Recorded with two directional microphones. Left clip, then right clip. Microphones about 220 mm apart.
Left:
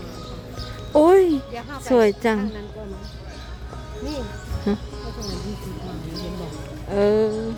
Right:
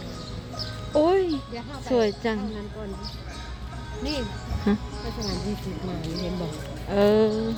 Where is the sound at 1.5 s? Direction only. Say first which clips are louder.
Left 4 dB; 35° left (ahead or behind).